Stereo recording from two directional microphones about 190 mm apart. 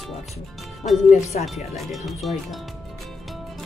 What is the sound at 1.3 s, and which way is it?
Speech, 40° left (ahead or behind).